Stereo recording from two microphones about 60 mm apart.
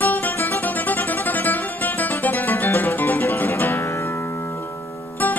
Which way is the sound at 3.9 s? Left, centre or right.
Left.